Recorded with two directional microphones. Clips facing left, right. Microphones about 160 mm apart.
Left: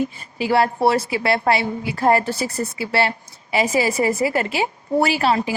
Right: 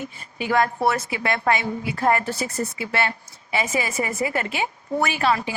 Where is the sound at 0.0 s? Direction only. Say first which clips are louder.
Left 7 dB; 30° left (ahead or behind).